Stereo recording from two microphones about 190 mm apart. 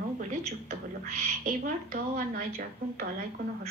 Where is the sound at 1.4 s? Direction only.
45° right (ahead or behind).